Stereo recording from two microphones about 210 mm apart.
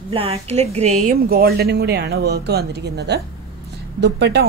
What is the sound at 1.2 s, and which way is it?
A woman's voice, 45° right (ahead or behind).